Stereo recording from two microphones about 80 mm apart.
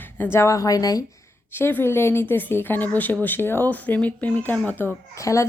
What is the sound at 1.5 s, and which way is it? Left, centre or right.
A woman's voice, left.